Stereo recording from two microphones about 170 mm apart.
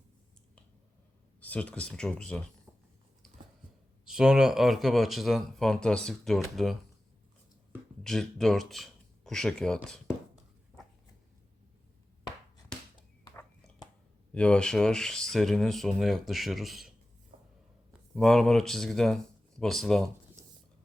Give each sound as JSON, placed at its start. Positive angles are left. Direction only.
{"t": 1.4, "sound": "speech", "side_deg": 10}
{"t": 3.2, "sound": "a sound", "side_deg": 5}
{"t": 4.0, "sound": "speech", "side_deg": -5}
{"t": 8.0, "sound": "speech", "side_deg": 0}
{"t": 13.2, "sound": "a sound", "side_deg": 25}
{"t": 14.3, "sound": "speech", "side_deg": 5}
{"t": 18.1, "sound": "speech", "side_deg": 0}